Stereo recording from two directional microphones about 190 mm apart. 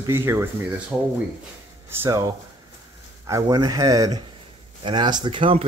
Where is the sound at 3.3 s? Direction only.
20° right (ahead or behind).